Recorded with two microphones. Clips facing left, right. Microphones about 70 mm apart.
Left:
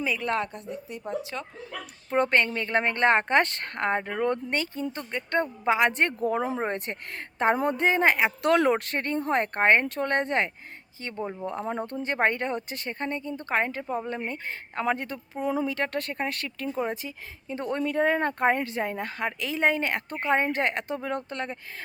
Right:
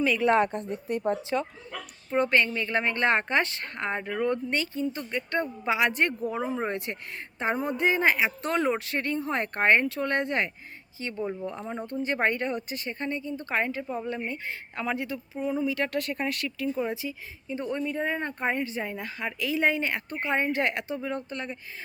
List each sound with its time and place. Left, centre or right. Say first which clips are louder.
0.3 s a woman's voice: right 6 dB; right
0.7 s speech: right 7 dB; right
1.3 s a woman's voice: right 8 dB; centre
2.0 s speech: left 1 dB; left
6.7 s speech: left 1 dB; left
8.4 s speech: left 5 dB; left
8.9 s speech: left 2 dB; left
12.1 s speech: left 2 dB; left
15.4 s speech: left 1 dB; left
15.7 s speech: right 1 dB; left